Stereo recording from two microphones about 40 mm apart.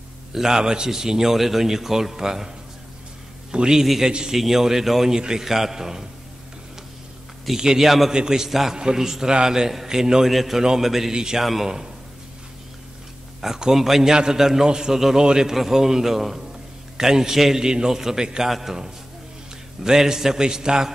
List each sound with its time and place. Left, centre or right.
0.3 s a man's voice: centre
3.5 s a man's voice: centre
7.5 s a man's voice: centre
8.1 s a man's voice: centre
8.5 s a man's voice: centre
13.4 s a man's voice: centre
18.5 s a man's voice: centre